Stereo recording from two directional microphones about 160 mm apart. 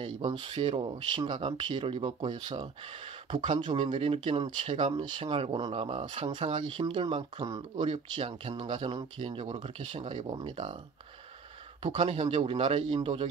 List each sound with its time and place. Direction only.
0.0 s speech: 30° right (ahead or behind)
7.7 s speech: 45° right (ahead or behind)
8.1 s speech: 30° right (ahead or behind)
11.8 s speech: 35° right (ahead or behind)